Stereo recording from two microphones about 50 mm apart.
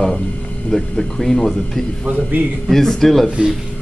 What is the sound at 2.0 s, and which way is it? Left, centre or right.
Speech, right.